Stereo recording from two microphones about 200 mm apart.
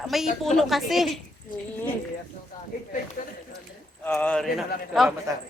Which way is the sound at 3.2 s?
40° left (ahead or behind).